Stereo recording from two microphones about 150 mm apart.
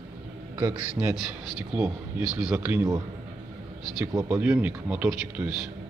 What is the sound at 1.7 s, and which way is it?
A man's voice, 5° right (ahead or behind).